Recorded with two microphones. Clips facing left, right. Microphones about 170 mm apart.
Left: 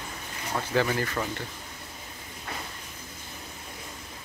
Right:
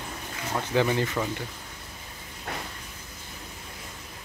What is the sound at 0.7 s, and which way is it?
Speech, 15° right (ahead or behind).